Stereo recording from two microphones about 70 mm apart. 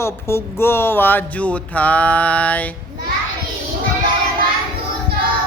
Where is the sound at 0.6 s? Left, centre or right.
Left; by 2.6 s centre.